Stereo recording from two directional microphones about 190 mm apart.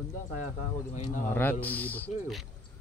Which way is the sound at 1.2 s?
10° left (ahead or behind).